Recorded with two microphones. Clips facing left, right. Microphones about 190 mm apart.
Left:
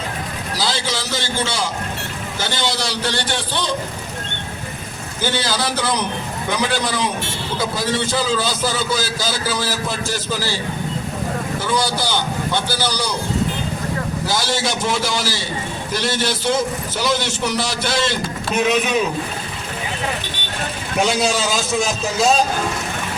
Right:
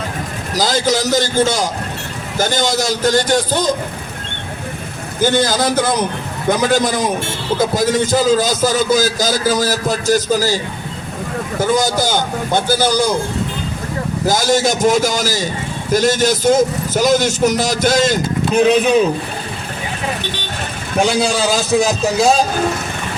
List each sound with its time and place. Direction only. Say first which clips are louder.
0.5 s a man's voice: right 8 dB; 45° right (ahead or behind)
5.2 s a man's voice: right 7 dB; 45° right (ahead or behind)
11.6 s a man's voice: right 7 dB; 45° right (ahead or behind)
14.3 s a man's voice: right 9 dB; 45° right (ahead or behind)
21.0 s a man's voice: right 3 dB; 30° right (ahead or behind)